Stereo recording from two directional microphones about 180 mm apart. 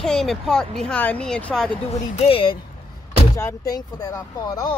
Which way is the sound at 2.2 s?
30° left (ahead or behind).